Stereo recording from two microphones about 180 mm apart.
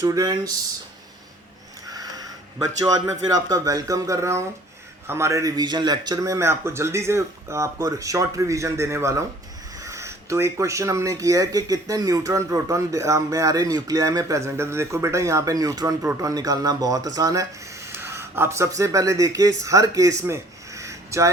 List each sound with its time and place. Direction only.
0.0 s speech: 20° right (ahead or behind)
1.9 s sniff: 20° right (ahead or behind)
2.8 s speech: 20° right (ahead or behind)
20.2 s a sound: 15° right (ahead or behind)